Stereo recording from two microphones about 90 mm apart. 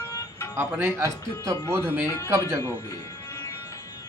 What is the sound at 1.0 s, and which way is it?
Speech, 35° right (ahead or behind).